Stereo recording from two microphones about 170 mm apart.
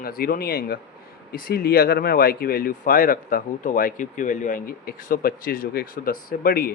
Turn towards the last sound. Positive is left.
turn(degrees=60)  # may be behind; listen again after turning